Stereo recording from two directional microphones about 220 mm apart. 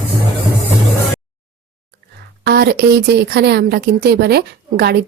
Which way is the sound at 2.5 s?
50° right (ahead or behind).